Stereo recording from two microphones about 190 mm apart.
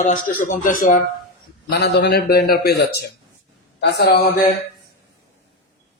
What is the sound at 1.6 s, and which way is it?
A man's voice, 60° left (ahead or behind).